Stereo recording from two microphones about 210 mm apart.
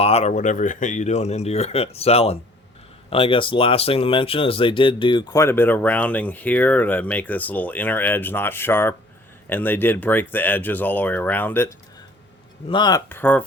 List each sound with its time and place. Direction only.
0.0 s speech: 30° left (ahead or behind); by 11.7 s 10° left (ahead or behind)
12.6 s speech: 20° left (ahead or behind)